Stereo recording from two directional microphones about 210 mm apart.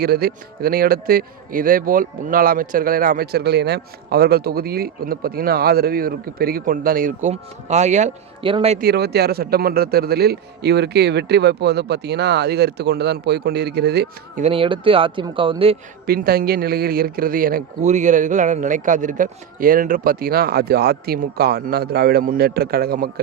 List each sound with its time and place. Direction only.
0.0 s a man's voice: 45° right (ahead or behind); by 8.8 s 25° right (ahead or behind)
8.8 s a man's voice: 50° right (ahead or behind)
14.4 s speech: 25° right (ahead or behind)
16.0 s a man's voice: 45° right (ahead or behind)